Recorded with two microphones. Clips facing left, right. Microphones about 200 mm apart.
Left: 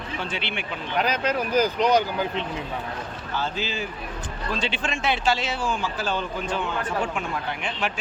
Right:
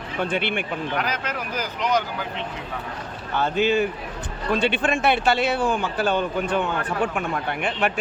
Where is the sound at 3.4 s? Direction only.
60° right (ahead or behind).